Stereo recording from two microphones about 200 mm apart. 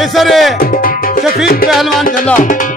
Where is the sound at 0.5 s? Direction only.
45° left (ahead or behind).